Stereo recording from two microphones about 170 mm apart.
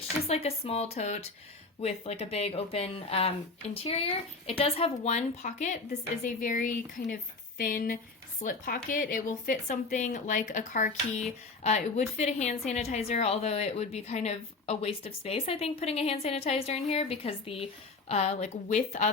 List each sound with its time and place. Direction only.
0.3 s a woman's voice: 35° left (ahead or behind)